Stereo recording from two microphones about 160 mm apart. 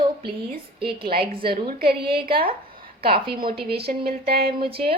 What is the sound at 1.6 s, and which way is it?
A woman's voice, 70° right (ahead or behind).